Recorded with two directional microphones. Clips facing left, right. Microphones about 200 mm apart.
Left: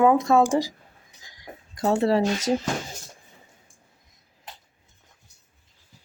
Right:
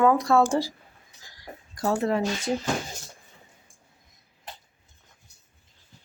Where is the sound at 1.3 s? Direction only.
20° left (ahead or behind); by 2.4 s 35° left (ahead or behind).